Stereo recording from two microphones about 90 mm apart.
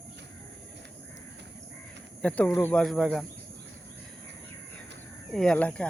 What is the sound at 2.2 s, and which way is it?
Speech, 15° left (ahead or behind).